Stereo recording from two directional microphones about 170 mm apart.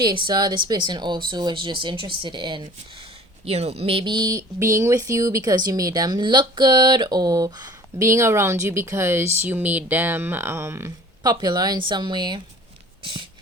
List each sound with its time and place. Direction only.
0.0 s speech: 25° right (ahead or behind)
3.4 s speech: 40° right (ahead or behind)
13.0 s a sound: 30° right (ahead or behind)